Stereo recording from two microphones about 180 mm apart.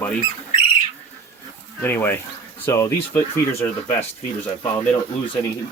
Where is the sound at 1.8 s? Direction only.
10° left (ahead or behind).